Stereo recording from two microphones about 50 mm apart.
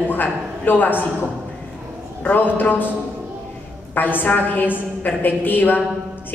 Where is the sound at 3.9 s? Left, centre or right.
Left.